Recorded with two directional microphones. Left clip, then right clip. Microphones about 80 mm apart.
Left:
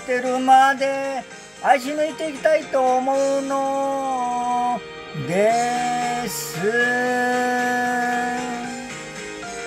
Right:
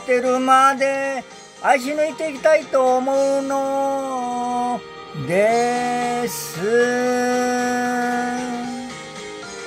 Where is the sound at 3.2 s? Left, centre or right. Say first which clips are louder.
Right 2 dB; right.